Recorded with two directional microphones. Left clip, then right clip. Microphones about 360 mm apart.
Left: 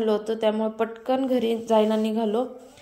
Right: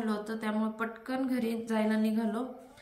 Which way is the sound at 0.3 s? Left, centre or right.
Centre.